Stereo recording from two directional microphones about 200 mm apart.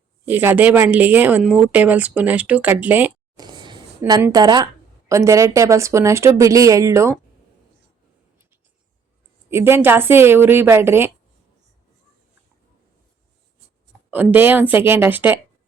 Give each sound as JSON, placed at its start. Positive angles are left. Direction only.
{"t": 0.3, "sound": "speech", "side_deg": -10}
{"t": 3.3, "sound": "a sound", "side_deg": -20}
{"t": 4.2, "sound": "speech", "side_deg": -20}
{"t": 9.5, "sound": "speech", "side_deg": -10}
{"t": 14.1, "sound": "speech", "side_deg": -10}